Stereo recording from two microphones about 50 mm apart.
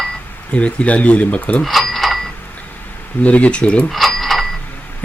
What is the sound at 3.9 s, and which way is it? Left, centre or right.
Mechanisms, centre.